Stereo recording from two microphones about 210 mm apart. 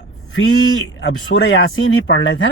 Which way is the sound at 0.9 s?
60° left (ahead or behind).